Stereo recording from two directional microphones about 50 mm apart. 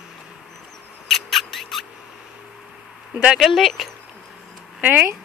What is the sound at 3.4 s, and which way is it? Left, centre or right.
Speech, centre.